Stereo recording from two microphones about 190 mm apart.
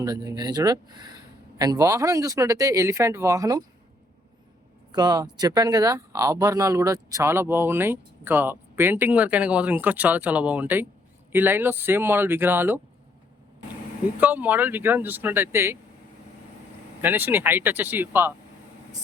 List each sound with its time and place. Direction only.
0.0 s speech: 20° right (ahead or behind)
4.9 s speech: 20° right (ahead or behind)
14.2 s speech: 10° right (ahead or behind)
17.0 s speech: 10° right (ahead or behind)